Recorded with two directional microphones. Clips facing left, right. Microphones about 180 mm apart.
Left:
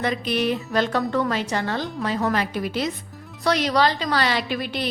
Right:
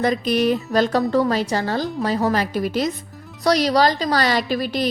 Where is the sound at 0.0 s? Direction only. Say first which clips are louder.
Right 5 dB; 40° right (ahead or behind).